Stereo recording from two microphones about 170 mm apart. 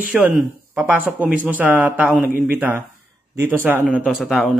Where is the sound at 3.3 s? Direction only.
15° right (ahead or behind).